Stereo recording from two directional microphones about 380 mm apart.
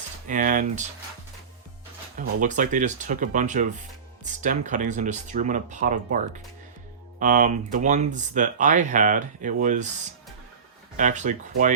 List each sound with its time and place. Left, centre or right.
0.3 s speech: right
2.1 s speech: centre
10.9 s speech: centre